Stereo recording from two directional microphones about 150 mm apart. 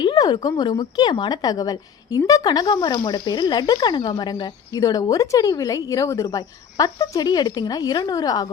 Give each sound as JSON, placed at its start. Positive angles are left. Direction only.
{"t": 0.0, "sound": "a woman's voice", "side_deg": 25}